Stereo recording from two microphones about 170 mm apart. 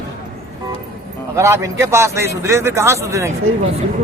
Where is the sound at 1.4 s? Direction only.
15° right (ahead or behind).